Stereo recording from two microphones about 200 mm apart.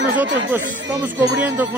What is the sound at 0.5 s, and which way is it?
Speech, 10° right (ahead or behind).